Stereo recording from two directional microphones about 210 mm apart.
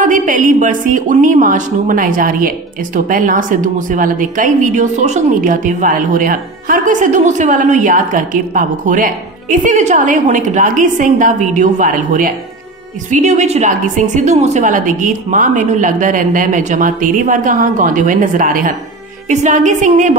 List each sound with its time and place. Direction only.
0.0 s a woman's voice: 40° right (ahead or behind)